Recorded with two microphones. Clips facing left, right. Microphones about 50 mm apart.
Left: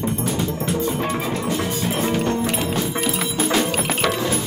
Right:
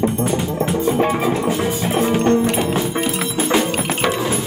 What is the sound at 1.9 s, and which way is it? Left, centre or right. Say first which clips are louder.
Music: right 6 dB; centre.